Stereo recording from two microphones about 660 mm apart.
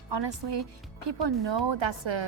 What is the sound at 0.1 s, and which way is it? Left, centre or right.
Speech, right.